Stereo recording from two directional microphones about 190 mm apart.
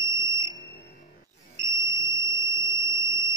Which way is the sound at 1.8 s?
15° right (ahead or behind).